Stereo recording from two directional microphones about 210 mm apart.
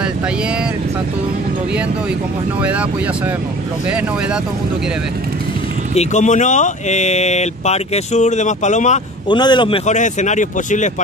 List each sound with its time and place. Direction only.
2.6 s speech: 5° right (ahead or behind)
5.9 s speech: 35° left (ahead or behind)
9.3 s a man's voice: 20° left (ahead or behind)
9.8 s speech: 35° left (ahead or behind)